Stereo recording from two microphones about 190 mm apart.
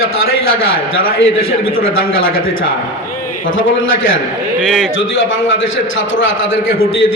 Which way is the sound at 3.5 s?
90° left.